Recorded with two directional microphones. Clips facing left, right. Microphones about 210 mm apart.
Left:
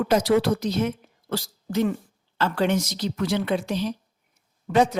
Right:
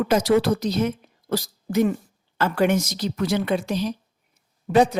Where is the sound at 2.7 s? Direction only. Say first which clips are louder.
Right 2 dB; 45° right (ahead or behind).